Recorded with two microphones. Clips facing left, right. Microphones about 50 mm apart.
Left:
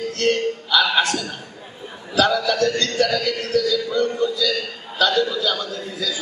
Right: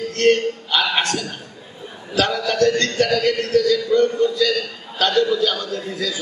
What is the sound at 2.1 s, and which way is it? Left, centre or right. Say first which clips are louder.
A man's voice: left 1 dB; right.